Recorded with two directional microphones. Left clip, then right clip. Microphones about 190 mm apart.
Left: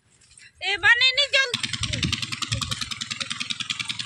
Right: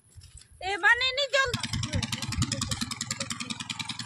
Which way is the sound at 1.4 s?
70° right (ahead or behind).